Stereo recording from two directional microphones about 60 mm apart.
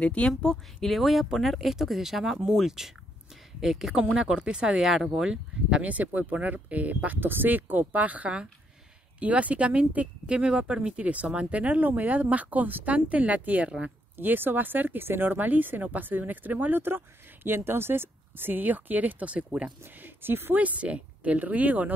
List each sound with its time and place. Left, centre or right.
0.0 s a woman's voice: centre
0.3 s speech: centre
3.9 s speech: right
14.1 s speech: right
20.0 s speech: right
20.5 s speech: right